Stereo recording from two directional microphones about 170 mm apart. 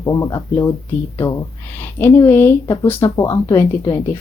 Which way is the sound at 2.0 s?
15° left (ahead or behind).